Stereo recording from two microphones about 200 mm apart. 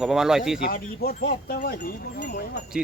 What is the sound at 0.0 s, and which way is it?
Speech, centre (ahead or behind).